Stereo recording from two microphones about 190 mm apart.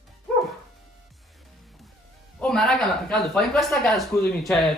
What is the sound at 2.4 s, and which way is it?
Speech, 5° left (ahead or behind).